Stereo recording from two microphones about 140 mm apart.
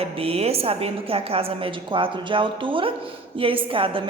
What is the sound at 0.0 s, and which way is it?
A woman's voice, 45° right (ahead or behind).